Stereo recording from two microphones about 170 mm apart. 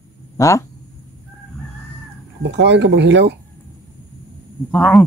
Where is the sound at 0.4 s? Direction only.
15° left (ahead or behind).